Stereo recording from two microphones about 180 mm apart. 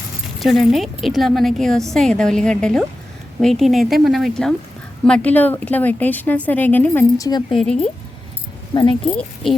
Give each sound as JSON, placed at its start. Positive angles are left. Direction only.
{"t": 0.3, "sound": "a woman's voice", "side_deg": 0}
{"t": 7.3, "sound": "speech", "side_deg": 25}
{"t": 7.6, "sound": "a woman's voice", "side_deg": 5}
{"t": 8.7, "sound": "speech", "side_deg": 25}
{"t": 9.1, "sound": "speech", "side_deg": 0}